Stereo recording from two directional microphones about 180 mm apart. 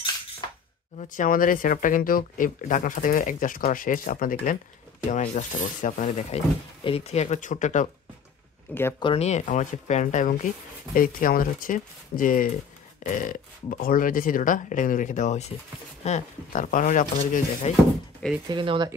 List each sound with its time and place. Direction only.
0.9 s speech: 45° left (ahead or behind)
8.7 s speech: 10° left (ahead or behind)
9.0 s speech: 35° left (ahead or behind)
18.5 s speech: 25° right (ahead or behind)